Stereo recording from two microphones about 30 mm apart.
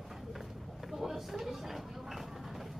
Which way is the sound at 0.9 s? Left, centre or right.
Centre.